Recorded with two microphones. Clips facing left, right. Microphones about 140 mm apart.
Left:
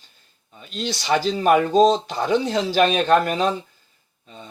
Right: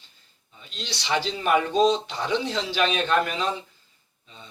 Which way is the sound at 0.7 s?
45° left (ahead or behind).